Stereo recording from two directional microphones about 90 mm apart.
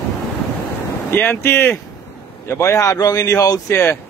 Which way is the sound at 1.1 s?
25° left (ahead or behind).